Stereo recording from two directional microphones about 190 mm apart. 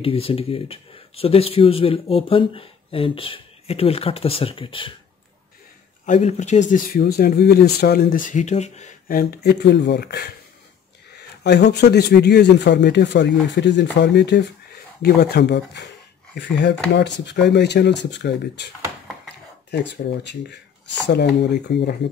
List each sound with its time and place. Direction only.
0.0 s speech: 30° left (ahead or behind)
6.0 s speech: 35° left (ahead or behind)
6.7 s speech: 50° left (ahead or behind)
11.4 s speech: 60° left (ahead or behind)
19.7 s speech: 65° left (ahead or behind)